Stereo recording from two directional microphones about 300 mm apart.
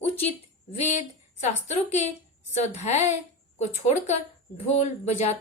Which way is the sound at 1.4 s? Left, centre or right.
Left.